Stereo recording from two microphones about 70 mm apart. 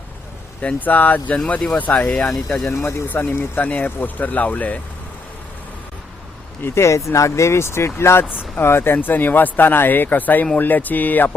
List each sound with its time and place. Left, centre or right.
0.6 s speech: left
2.0 s speech: centre
2.6 s speech: left
6.6 s speech: left